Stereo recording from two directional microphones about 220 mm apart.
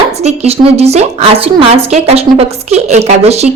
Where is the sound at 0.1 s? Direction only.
30° right (ahead or behind).